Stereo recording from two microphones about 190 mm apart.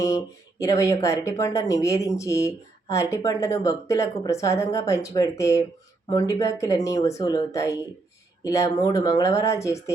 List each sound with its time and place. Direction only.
0.6 s speech: 15° left (ahead or behind)